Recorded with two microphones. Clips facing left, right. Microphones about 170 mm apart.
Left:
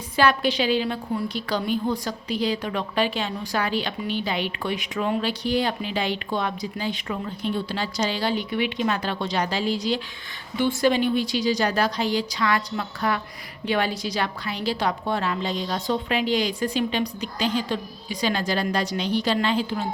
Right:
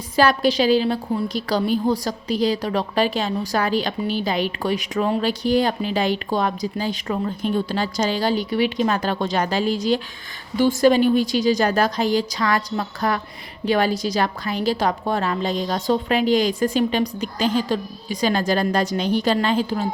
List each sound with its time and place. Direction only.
0.2 s a woman's voice: 40° right (ahead or behind)